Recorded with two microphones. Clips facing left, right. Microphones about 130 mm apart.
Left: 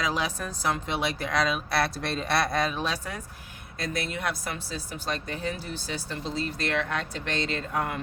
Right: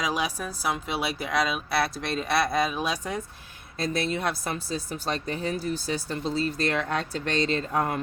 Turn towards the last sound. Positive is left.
turn(degrees=-35)  # may be behind; listen again after turning